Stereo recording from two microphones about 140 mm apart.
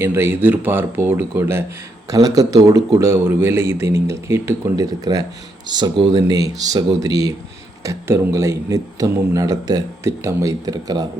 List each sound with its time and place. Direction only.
0.0 s speech: 15° right (ahead or behind)
5.6 s speech: 30° right (ahead or behind)